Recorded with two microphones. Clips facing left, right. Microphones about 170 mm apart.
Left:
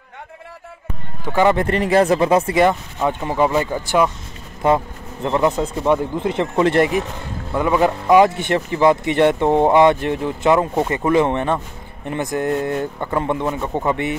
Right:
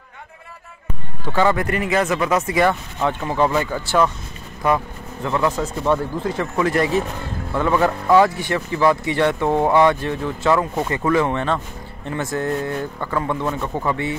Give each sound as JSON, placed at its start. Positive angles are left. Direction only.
{"t": 1.2, "sound": "speech", "side_deg": 15}
{"t": 2.7, "sound": "speech", "side_deg": 15}
{"t": 7.5, "sound": "speech", "side_deg": 15}